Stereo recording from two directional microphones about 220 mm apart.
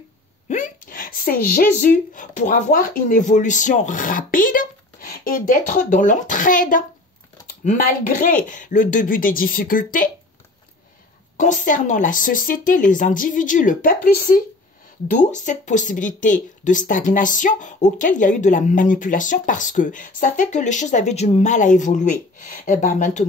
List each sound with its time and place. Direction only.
0.5 s speech: 35° left (ahead or behind)
11.3 s speech: 35° left (ahead or behind)